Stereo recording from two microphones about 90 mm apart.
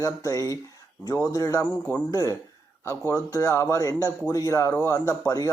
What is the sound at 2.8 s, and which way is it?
Speech, 30° left (ahead or behind).